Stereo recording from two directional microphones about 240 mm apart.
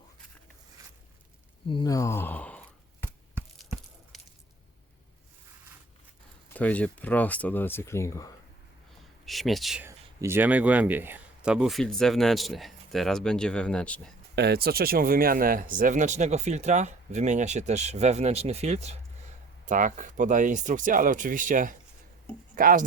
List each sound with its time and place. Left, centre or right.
1.6 s speech: centre
4.1 s squish: centre
6.5 s speech: centre
9.2 s speech: centre
14.3 s speech: right